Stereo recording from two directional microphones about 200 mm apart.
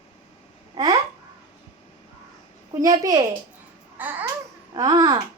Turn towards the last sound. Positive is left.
turn(degrees=-20)  # may be behind; listen again after turning